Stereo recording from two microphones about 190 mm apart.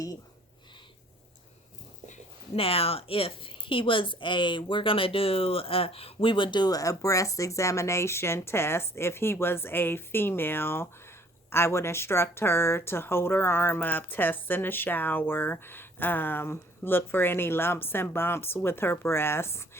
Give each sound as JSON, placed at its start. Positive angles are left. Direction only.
{"t": 2.6, "sound": "a woman's voice", "side_deg": 30}